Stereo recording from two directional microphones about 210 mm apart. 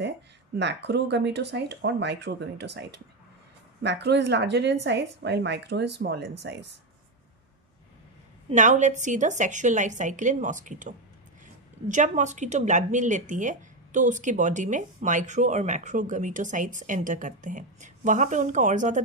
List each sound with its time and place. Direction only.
0.6 s speech: 55° right (ahead or behind)
8.5 s a woman's voice: 35° right (ahead or behind)